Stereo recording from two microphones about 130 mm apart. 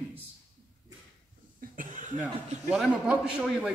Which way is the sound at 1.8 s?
85° right.